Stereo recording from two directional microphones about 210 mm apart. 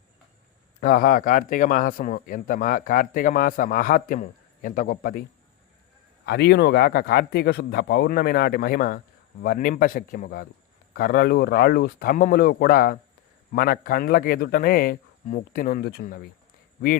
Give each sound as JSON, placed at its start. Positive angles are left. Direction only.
{"t": 0.8, "sound": "a man's voice", "side_deg": 45}
{"t": 6.2, "sound": "a man's voice", "side_deg": 50}